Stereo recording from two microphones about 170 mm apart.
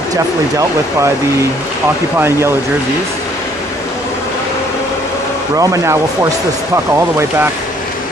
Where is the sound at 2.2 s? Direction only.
15° right (ahead or behind).